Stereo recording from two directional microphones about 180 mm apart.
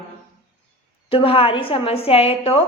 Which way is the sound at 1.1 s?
30° left (ahead or behind).